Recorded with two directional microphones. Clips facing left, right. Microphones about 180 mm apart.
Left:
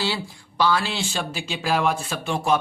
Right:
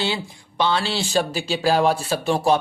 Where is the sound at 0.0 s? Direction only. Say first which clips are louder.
Right 2 dB; 20° right (ahead or behind).